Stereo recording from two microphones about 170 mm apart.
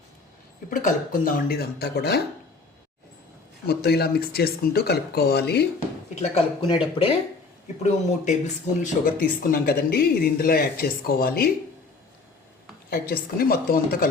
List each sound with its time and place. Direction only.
0.7 s speech: 55° left (ahead or behind); by 2.2 s 70° left (ahead or behind)
3.7 s speech: 70° left (ahead or behind)
6.1 s speech: 35° left (ahead or behind)
7.8 s speech: 45° left (ahead or behind)
9.4 s speech: 65° left (ahead or behind)
12.9 s speech: 60° left (ahead or behind)